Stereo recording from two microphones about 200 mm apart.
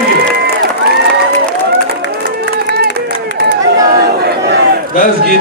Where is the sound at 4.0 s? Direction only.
50° right (ahead or behind).